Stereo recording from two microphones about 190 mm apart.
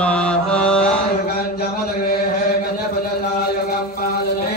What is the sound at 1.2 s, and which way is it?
Chant, 55° left (ahead or behind).